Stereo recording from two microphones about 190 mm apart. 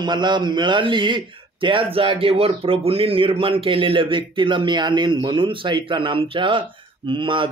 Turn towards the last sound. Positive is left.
turn(degrees=-25)  # may be behind; listen again after turning